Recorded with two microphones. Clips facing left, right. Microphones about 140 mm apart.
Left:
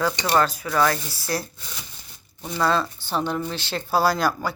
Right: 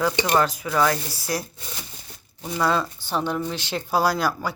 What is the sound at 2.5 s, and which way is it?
Speech, 10° right (ahead or behind).